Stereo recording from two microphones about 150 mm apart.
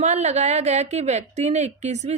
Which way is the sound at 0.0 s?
50° right (ahead or behind).